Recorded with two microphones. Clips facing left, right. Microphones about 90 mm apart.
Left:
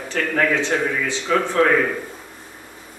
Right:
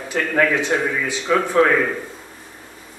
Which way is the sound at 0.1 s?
15° right (ahead or behind).